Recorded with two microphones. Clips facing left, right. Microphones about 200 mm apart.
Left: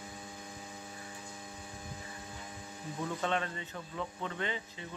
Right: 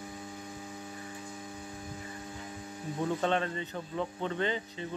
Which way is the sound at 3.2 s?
35° right (ahead or behind).